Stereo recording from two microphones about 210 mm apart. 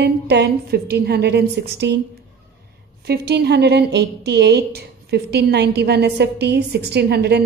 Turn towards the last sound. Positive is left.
turn(degrees=-50)  # may be behind; listen again after turning